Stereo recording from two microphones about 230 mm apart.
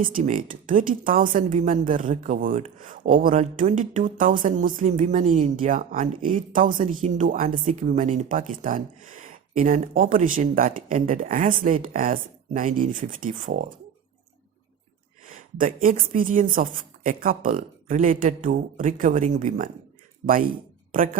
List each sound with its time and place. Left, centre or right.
0.0 s speech: right
15.5 s speech: right